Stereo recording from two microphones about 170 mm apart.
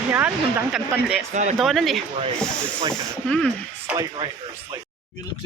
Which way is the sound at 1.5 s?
Centre (ahead or behind).